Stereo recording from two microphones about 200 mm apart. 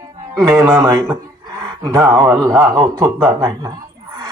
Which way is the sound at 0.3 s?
10° right (ahead or behind).